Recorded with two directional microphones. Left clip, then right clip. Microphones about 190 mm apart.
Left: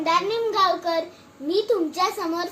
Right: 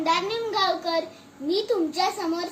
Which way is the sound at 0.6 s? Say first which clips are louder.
Left 2 dB; 10° right (ahead or behind).